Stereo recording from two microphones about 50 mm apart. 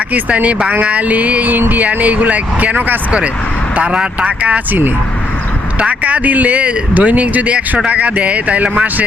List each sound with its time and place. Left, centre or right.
0.1 s speech: right
3.9 s speech: right
5.8 s speech: right